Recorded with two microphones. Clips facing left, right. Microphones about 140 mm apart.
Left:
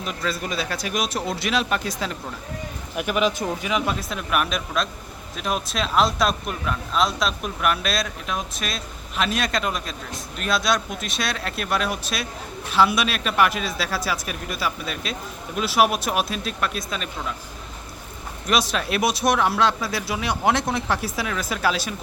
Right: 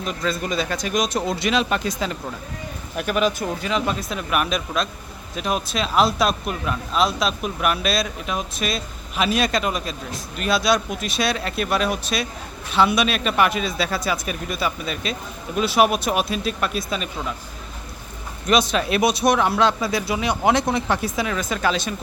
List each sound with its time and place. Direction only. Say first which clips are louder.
0.0 s speech: right 3 dB; centre (ahead or behind)
2.9 s speech: right 1 dB; 15° left (ahead or behind); by 17.1 s centre (ahead or behind)
18.4 s speech: right 4 dB; centre (ahead or behind)